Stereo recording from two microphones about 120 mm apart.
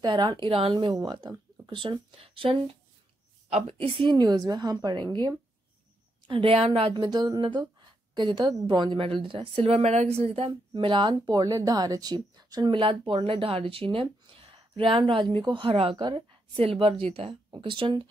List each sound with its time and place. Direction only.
0.0 s speech: 40° right (ahead or behind)
0.9 s speech: 35° right (ahead or behind)
3.4 s a woman's voice: 65° right (ahead or behind); by 4.2 s 45° right (ahead or behind)
4.2 s speech: 30° right (ahead or behind)
6.2 s speech: 45° right (ahead or behind)
6.9 s speech: 35° right (ahead or behind)
11.2 s speech: 30° right (ahead or behind)
12.8 s speech: 50° right (ahead or behind)
16.0 s a woman's voice: 35° right (ahead or behind)
16.6 s speech: 50° right (ahead or behind)